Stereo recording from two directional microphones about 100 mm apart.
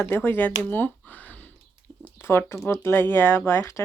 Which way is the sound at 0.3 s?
20° left (ahead or behind).